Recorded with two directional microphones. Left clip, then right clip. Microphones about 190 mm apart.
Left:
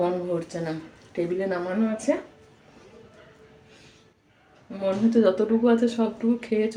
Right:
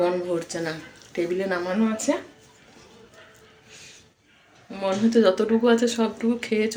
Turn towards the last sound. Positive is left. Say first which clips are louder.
# right 1 dB
turn(degrees=0)  # may be behind; listen again after turning